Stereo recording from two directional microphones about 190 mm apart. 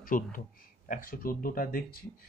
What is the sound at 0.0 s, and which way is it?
A man's voice, 45° left (ahead or behind).